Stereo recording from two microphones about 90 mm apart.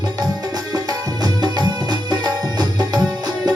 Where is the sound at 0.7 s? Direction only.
45° right (ahead or behind).